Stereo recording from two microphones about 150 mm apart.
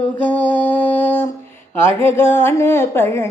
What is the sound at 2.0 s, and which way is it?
Speech, 15° left (ahead or behind).